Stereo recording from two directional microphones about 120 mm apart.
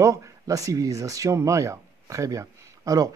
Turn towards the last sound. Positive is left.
turn(degrees=-30)  # may be behind; listen again after turning